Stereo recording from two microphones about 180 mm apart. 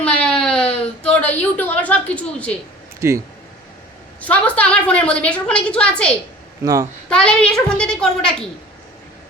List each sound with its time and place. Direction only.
0.0 s a sound: 5° left (ahead or behind)
1.4 s a woman's voice: 10° left (ahead or behind)
3.0 s speech: 15° right (ahead or behind)
4.2 s a woman's voice: 10° left (ahead or behind)